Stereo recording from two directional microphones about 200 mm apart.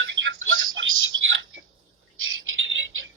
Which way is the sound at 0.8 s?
70° right (ahead or behind).